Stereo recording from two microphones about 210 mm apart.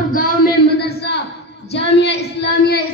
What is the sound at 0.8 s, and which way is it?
A woman's voice, 50° left (ahead or behind).